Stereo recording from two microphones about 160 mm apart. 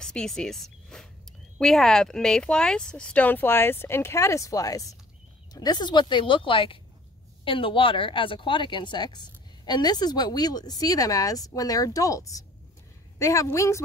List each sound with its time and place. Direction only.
0.0 s speech: 5° left (ahead or behind)